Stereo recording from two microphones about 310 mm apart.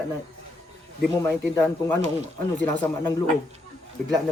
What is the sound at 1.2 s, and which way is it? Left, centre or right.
Speech, centre.